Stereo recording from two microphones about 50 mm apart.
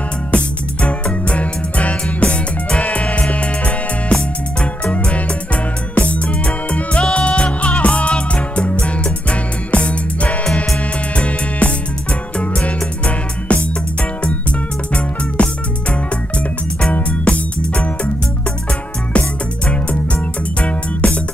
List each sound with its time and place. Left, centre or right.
0.3 s music: left
15.4 s music: left
16.9 s music: left
19.1 s music: left